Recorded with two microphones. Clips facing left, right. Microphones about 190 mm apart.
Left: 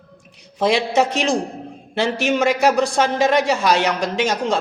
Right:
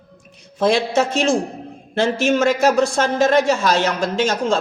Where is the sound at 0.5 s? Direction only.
15° left (ahead or behind).